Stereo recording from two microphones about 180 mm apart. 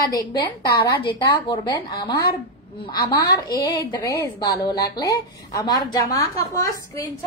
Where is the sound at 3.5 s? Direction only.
20° left (ahead or behind).